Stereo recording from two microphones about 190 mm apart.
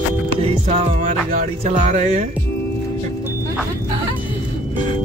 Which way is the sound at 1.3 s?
40° right (ahead or behind).